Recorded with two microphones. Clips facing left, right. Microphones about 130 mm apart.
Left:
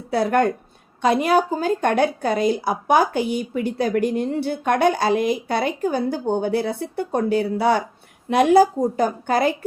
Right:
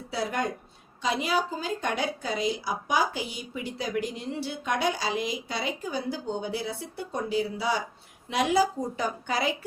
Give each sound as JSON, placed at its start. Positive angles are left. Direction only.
{"t": 0.1, "sound": "a woman's voice", "side_deg": 55}